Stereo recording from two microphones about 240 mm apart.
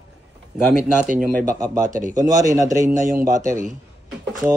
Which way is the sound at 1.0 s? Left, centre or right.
Right.